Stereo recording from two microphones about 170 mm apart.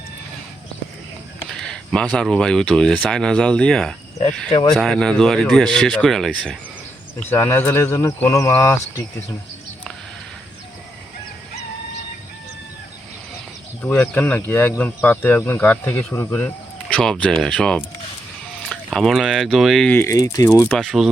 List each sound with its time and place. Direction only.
1.5 s speech: 5° left (ahead or behind)
7.2 s speech: 15° left (ahead or behind)
13.8 s speech: 10° left (ahead or behind)
20.0 s speech: 20° left (ahead or behind)
20.7 s speech: 5° left (ahead or behind)